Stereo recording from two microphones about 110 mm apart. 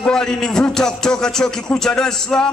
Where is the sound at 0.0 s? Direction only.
5° left (ahead or behind).